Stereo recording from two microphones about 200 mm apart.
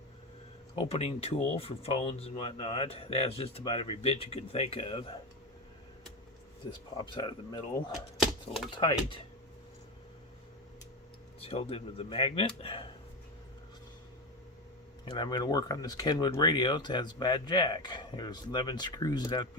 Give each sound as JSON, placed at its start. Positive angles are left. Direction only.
{"t": 0.9, "sound": "speech", "side_deg": 30}
{"t": 6.9, "sound": "speech", "side_deg": 20}
{"t": 8.2, "sound": "speech", "side_deg": 0}
{"t": 8.8, "sound": "speech", "side_deg": 25}
{"t": 11.3, "sound": "speech", "side_deg": 30}
{"t": 15.0, "sound": "speech", "side_deg": 25}